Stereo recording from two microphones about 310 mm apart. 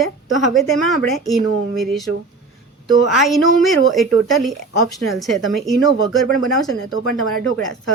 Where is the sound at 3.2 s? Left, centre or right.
Centre.